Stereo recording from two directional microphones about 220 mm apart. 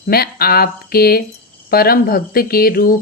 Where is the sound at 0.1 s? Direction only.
45° left (ahead or behind).